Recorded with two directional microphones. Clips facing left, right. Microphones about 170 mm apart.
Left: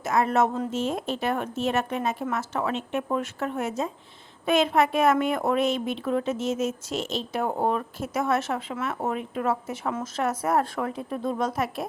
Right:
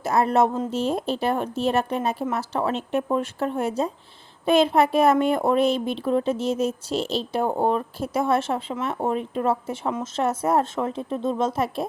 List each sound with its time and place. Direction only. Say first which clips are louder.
0.0 s speech: right 3 dB; 35° right (ahead or behind)